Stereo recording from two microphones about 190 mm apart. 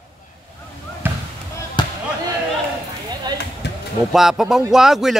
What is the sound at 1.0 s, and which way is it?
Basketball bounce, 10° right (ahead or behind).